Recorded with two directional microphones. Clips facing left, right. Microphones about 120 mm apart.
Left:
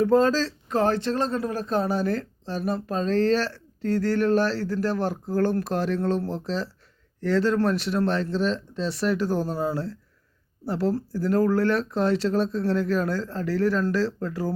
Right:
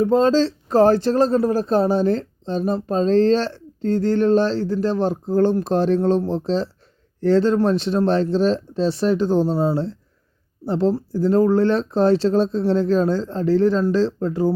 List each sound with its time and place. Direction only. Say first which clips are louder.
0.0 s speech: right 4 dB; 20° right (ahead or behind)